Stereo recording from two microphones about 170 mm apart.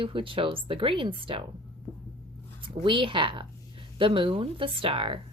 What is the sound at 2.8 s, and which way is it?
A woman's voice, 30° right (ahead or behind).